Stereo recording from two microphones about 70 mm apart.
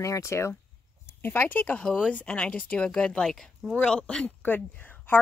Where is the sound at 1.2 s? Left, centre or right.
Left.